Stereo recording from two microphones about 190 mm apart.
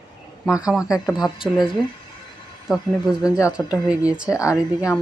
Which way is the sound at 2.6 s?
Centre (ahead or behind).